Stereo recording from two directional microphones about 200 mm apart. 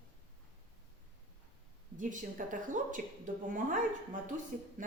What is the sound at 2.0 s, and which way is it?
A woman's voice, 40° right (ahead or behind).